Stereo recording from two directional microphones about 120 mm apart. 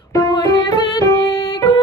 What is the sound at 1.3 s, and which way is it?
Music, 45° left (ahead or behind).